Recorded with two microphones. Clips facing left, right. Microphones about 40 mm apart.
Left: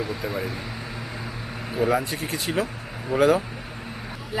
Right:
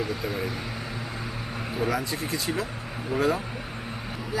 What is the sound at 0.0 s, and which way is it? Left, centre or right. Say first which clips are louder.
Speech: left 1 dB; centre.